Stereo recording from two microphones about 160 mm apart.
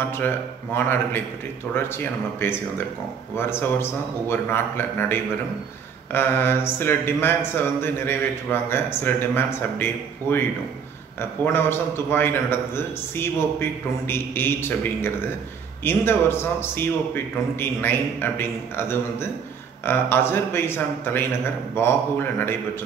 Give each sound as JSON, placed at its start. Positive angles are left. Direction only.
{"t": 0.0, "sound": "a man's voice", "side_deg": 15}